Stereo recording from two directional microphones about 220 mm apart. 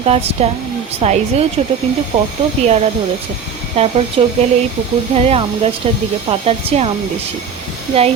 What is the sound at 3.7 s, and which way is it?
Speech, 30° right (ahead or behind).